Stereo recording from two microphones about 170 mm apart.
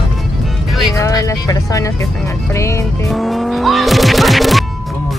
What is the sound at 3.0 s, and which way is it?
Music, centre (ahead or behind).